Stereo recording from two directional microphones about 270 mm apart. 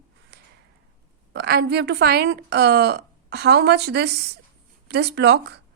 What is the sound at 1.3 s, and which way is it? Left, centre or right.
A woman's voice, right.